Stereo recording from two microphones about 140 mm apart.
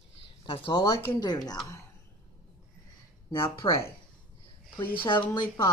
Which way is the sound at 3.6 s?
35° left (ahead or behind).